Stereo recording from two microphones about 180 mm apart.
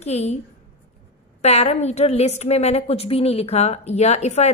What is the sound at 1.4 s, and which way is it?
A woman's voice, 35° left (ahead or behind).